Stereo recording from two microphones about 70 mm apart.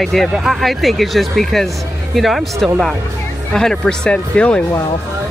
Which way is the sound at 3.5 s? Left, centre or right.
Centre.